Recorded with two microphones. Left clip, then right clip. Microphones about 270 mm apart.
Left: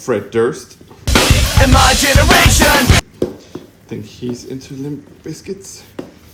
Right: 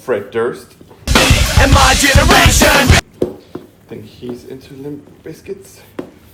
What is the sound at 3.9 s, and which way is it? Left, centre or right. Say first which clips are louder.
Speech: left 2 dB; left.